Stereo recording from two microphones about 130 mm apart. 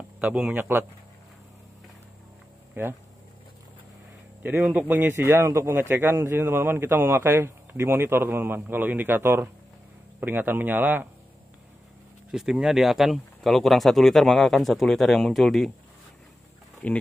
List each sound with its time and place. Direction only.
0.2 s a man's voice: 10° right (ahead or behind)
2.7 s speech: 15° right (ahead or behind)
4.4 s a man's voice: 15° right (ahead or behind)
12.3 s speech: 5° right (ahead or behind)
16.8 s speech: 10° left (ahead or behind)